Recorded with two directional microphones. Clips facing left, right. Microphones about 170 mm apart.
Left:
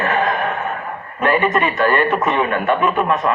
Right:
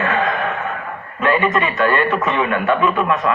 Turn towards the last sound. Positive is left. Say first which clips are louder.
# even
turn(degrees=35)  # may be behind; listen again after turning